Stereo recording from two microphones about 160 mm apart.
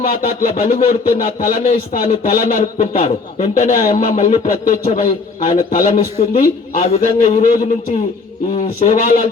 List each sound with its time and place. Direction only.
0.0 s speech: 60° left (ahead or behind)
2.2 s speech: 40° left (ahead or behind)
2.5 s a man's voice: 55° left (ahead or behind); by 4.4 s 40° left (ahead or behind)
4.4 s a man's voice: 55° left (ahead or behind)